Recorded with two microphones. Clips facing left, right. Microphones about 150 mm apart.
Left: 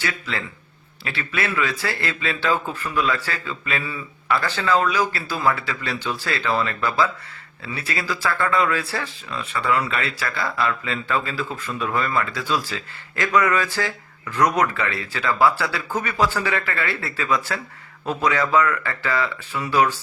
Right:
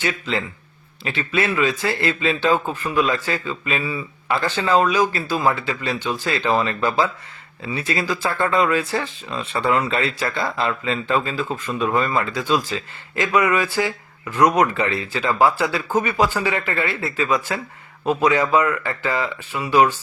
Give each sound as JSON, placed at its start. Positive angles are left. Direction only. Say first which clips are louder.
{"t": 0.0, "sound": "speech", "louder": "right 4 dB", "side_deg": -20}
{"t": 11.7, "sound": "speech", "louder": "right 3 dB", "side_deg": -30}